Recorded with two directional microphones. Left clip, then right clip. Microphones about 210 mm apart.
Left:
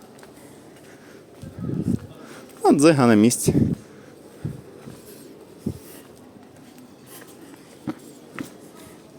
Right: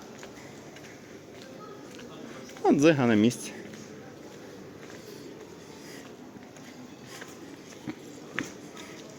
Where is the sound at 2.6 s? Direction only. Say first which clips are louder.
Left 6 dB; 30° left (ahead or behind).